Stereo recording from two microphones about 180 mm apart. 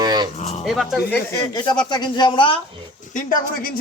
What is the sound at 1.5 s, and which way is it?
Speech, 25° left (ahead or behind).